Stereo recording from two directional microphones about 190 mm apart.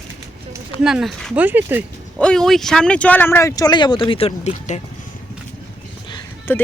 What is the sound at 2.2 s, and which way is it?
Speech, 5° left (ahead or behind).